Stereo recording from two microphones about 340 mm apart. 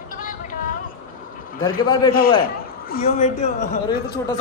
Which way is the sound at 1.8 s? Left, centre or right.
Centre.